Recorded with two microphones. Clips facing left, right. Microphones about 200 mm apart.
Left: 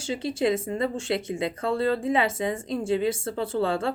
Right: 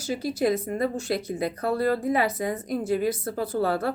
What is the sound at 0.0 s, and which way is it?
Speech, 25° left (ahead or behind).